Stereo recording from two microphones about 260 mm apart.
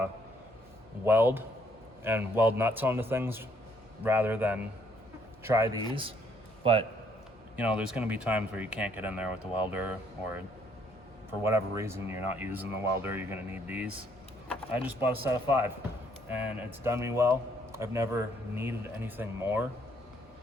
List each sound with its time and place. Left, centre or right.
1.0 s a man's voice: centre
5.9 s a man's voice: centre
7.5 s speech: centre
11.3 s a man's voice: centre